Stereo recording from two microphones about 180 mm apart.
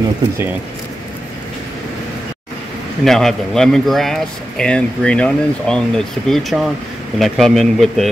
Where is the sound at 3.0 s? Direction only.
Centre (ahead or behind).